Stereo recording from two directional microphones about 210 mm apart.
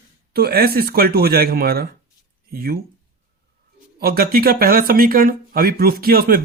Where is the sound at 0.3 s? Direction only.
50° right (ahead or behind).